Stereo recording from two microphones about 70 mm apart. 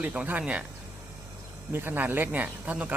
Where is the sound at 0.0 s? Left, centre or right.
Right.